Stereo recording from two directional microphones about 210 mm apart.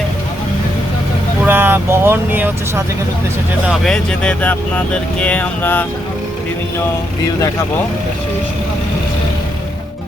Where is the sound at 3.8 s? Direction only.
5° left (ahead or behind).